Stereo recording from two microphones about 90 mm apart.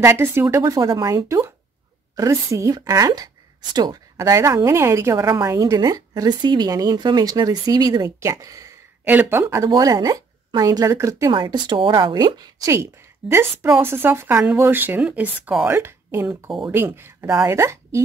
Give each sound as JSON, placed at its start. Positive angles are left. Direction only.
{"t": 0.1, "sound": "speech", "side_deg": -30}
{"t": 5.1, "sound": "a woman's voice", "side_deg": -50}
{"t": 8.2, "sound": "speech", "side_deg": -35}
{"t": 9.0, "sound": "speech", "side_deg": -20}
{"t": 9.7, "sound": "speech", "side_deg": -45}
{"t": 11.3, "sound": "a woman's voice", "side_deg": -55}
{"t": 12.7, "sound": "a woman's voice", "side_deg": -25}